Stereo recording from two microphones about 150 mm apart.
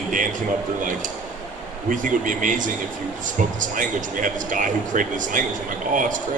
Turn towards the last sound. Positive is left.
turn(degrees=-60)  # may be behind; listen again after turning